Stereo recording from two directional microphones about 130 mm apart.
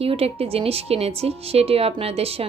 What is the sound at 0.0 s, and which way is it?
Speech, 50° right (ahead or behind).